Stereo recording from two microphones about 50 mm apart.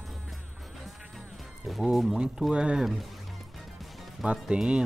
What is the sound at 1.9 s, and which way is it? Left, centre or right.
Speech, centre.